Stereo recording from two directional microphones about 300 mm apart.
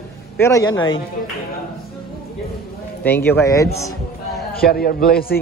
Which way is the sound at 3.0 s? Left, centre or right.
Centre.